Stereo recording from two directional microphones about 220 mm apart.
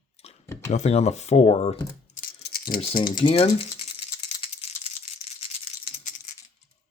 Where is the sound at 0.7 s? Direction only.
30° left (ahead or behind).